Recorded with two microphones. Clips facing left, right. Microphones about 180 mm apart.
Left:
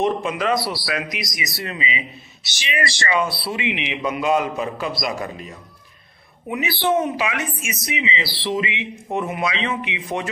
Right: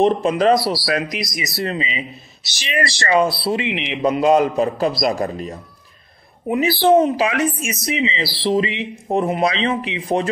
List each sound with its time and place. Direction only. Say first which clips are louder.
0.0 s speech: right 6 dB; 35° right (ahead or behind)